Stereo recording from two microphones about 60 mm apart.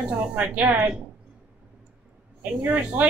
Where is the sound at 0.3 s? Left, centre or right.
Right.